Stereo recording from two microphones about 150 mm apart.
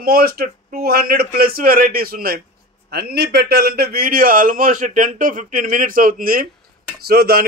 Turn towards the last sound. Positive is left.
turn(degrees=-90)